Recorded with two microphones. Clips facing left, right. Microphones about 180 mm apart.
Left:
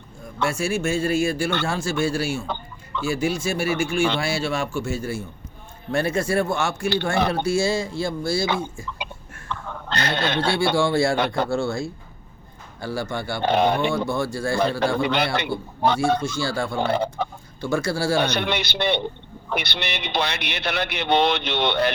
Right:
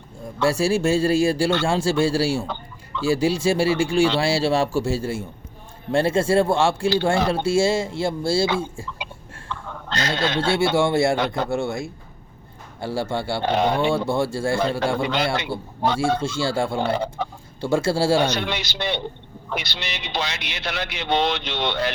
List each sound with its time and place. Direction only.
0.4 s speech: 35° right (ahead or behind)
9.5 s a sound: 60° left (ahead or behind)
10.4 s speech: 25° right (ahead or behind)
15.0 s a man's voice: 60° left (ahead or behind)
15.5 s speech: 30° right (ahead or behind)
18.2 s a man's voice: 60° left (ahead or behind)